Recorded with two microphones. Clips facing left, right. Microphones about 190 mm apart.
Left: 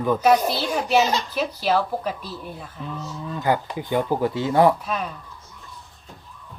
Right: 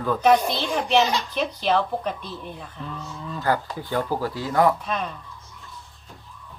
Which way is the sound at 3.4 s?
20° left (ahead or behind).